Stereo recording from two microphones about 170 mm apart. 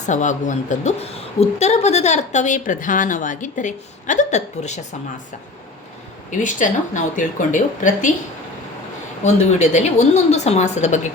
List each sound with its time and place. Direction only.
0.0 s a woman's voice: 45° left (ahead or behind)
6.3 s a woman's voice: 45° left (ahead or behind)
9.2 s a woman's voice: 40° left (ahead or behind)